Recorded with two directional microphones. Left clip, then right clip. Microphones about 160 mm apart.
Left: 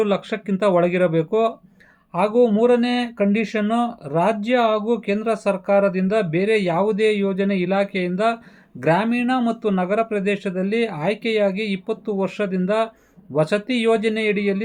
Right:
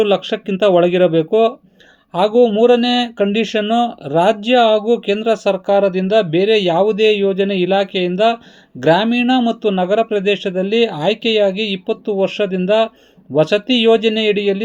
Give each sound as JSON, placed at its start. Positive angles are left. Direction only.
{"t": 0.0, "sound": "speech", "side_deg": -20}